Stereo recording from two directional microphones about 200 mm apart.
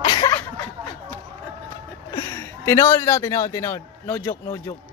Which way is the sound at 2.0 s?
15° left (ahead or behind).